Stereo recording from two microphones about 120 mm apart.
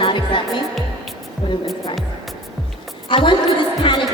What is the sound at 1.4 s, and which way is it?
Music, 50° left (ahead or behind).